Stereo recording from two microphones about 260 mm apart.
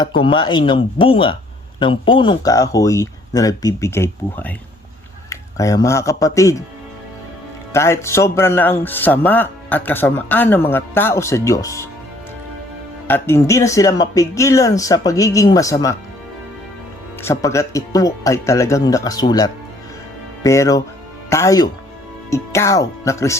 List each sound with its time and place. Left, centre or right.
0.0 s speech: centre
7.7 s speech: centre
13.1 s speech: centre
17.2 s speech: centre